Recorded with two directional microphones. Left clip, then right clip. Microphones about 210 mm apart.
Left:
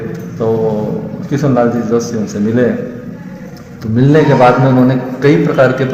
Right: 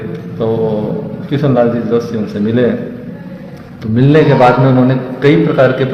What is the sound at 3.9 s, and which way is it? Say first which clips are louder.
A man's voice: even; centre (ahead or behind).